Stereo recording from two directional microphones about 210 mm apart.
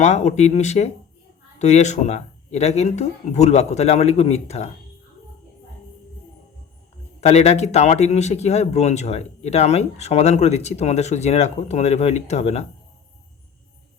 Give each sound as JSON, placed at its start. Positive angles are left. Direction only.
{"t": 0.0, "sound": "speech", "side_deg": 35}
{"t": 7.2, "sound": "speech", "side_deg": 30}